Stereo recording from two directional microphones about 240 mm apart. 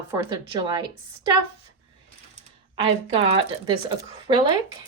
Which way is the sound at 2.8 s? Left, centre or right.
Right.